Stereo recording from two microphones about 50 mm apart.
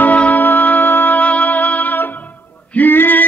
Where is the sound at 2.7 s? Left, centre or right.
Left.